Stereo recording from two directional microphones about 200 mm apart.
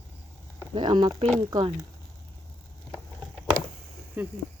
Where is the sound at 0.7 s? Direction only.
25° right (ahead or behind).